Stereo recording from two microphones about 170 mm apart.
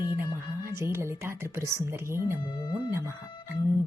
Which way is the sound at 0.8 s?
15° right (ahead or behind).